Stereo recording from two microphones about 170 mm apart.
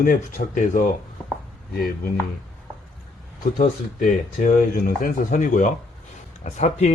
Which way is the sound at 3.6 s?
55° left (ahead or behind).